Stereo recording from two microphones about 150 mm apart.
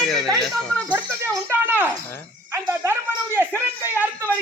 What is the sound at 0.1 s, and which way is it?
Speech, 5° left (ahead or behind).